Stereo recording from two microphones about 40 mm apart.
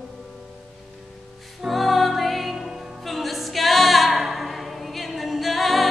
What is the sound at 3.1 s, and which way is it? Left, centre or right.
A capella, centre.